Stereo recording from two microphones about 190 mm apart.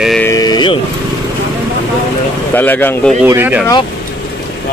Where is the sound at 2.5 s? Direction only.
10° left (ahead or behind).